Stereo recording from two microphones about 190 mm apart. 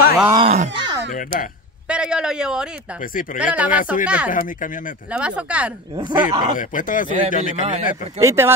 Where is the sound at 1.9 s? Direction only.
5° right (ahead or behind).